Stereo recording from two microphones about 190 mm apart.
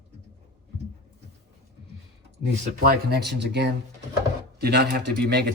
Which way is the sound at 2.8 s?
55° right (ahead or behind).